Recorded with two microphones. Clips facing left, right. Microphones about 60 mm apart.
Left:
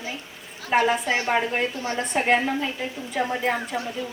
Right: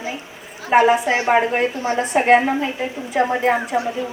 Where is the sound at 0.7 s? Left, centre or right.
Right.